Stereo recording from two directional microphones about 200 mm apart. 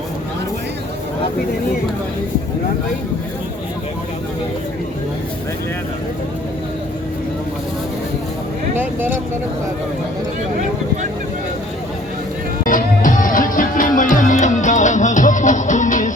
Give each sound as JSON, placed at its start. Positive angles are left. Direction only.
{"t": 8.7, "sound": "speech", "side_deg": -10}
{"t": 12.6, "sound": "music", "side_deg": 40}